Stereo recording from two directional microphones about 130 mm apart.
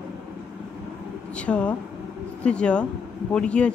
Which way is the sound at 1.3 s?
10° left (ahead or behind).